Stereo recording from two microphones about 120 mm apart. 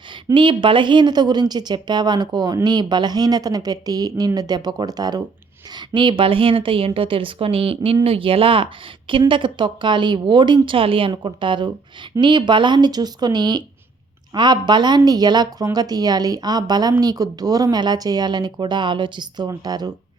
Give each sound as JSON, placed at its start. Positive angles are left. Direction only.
{"t": 0.3, "sound": "a woman's voice", "side_deg": -45}